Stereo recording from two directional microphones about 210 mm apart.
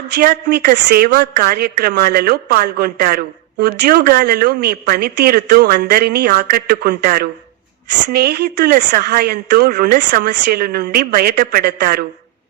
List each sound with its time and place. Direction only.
0.2 s a woman's voice: 45° right (ahead or behind)